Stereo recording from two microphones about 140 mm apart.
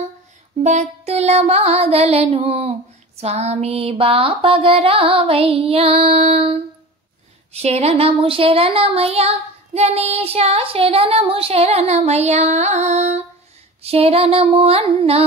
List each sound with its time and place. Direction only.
0.6 s music: 55° right (ahead or behind)